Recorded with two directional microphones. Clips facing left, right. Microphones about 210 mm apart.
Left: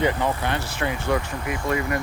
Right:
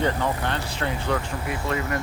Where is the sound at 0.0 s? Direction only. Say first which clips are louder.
Left 2 dB; 10° left (ahead or behind).